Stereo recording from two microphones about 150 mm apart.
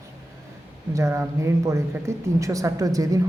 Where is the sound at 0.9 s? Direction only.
20° right (ahead or behind).